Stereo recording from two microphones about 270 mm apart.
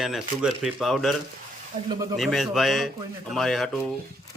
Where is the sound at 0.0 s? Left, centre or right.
Centre.